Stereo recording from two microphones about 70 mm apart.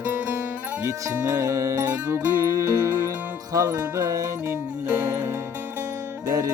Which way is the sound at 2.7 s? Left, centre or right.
Right.